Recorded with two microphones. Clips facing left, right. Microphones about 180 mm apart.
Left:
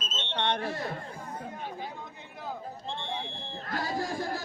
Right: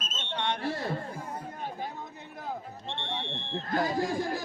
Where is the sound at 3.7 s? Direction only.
15° right (ahead or behind).